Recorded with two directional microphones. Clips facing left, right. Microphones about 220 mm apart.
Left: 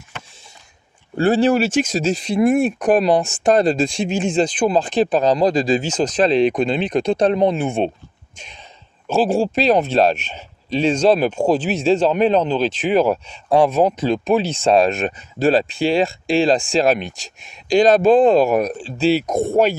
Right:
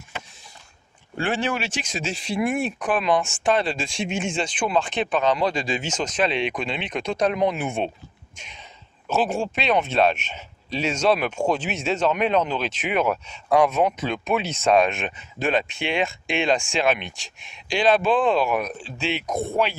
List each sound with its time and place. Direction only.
1.1 s speech: 40° left (ahead or behind)